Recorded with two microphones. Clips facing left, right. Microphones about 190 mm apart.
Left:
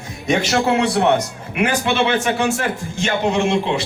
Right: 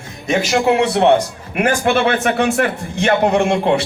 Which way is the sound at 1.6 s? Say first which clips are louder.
Right 3 dB; 50° right (ahead or behind).